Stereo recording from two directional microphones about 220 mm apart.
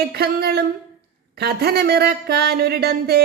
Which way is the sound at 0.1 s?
45° right (ahead or behind).